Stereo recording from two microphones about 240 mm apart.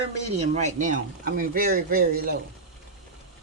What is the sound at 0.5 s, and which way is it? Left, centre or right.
Speech, right.